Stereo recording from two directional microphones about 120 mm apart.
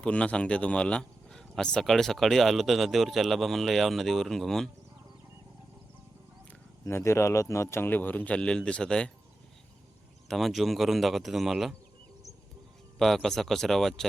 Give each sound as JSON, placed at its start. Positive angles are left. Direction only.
{"t": 0.0, "sound": "speech", "side_deg": 10}
{"t": 6.8, "sound": "speech", "side_deg": 25}
{"t": 10.2, "sound": "speech", "side_deg": 0}
{"t": 13.0, "sound": "speech", "side_deg": 0}